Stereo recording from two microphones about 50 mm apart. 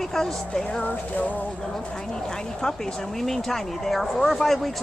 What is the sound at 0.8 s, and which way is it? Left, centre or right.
Music, left.